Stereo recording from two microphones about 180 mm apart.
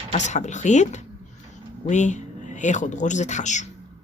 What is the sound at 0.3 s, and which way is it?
Speech, 40° left (ahead or behind).